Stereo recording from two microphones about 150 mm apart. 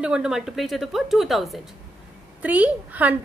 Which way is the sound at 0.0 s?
5° right (ahead or behind).